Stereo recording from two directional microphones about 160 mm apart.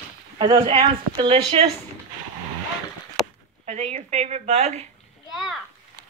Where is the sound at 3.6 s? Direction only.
45° right (ahead or behind).